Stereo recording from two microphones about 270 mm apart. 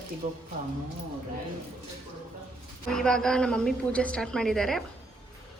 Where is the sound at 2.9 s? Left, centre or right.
Centre.